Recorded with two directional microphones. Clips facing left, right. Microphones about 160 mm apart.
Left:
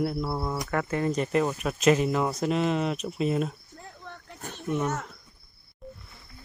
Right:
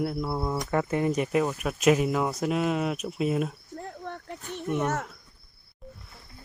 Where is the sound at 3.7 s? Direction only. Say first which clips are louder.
Right 7 dB; 55° right (ahead or behind).